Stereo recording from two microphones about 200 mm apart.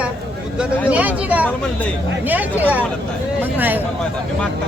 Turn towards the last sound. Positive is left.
turn(degrees=-10)  # may be behind; listen again after turning